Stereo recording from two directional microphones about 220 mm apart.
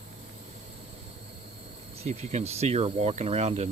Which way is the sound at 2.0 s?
30° right (ahead or behind).